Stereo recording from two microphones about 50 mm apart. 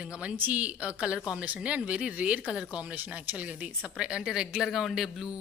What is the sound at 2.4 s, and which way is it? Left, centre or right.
Speech, centre.